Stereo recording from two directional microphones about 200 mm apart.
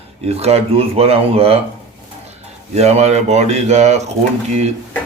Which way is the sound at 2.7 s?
35° right (ahead or behind).